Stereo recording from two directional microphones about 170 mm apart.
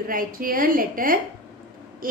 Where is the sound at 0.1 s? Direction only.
55° right (ahead or behind).